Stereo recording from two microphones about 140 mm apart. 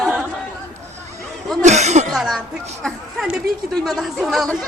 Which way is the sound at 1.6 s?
55° right (ahead or behind).